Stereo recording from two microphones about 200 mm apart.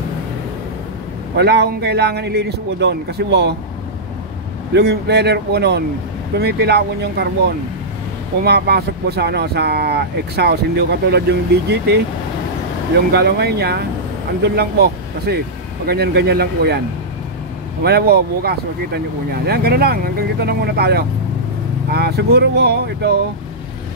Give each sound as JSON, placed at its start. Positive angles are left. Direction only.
{"t": 1.3, "sound": "speech", "side_deg": -55}
{"t": 4.7, "sound": "speech", "side_deg": -55}
{"t": 13.1, "sound": "speech", "side_deg": -55}
{"t": 17.8, "sound": "speech", "side_deg": -55}